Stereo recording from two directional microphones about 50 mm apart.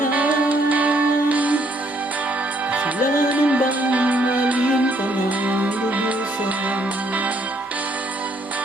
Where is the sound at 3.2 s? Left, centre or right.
Right.